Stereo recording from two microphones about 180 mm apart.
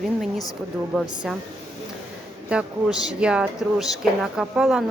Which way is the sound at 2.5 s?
5° right (ahead or behind).